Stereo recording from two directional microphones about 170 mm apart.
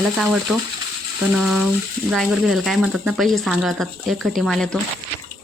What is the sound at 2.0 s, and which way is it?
Speech, centre (ahead or behind).